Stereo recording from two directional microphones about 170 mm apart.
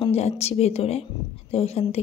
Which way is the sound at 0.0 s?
40° left (ahead or behind).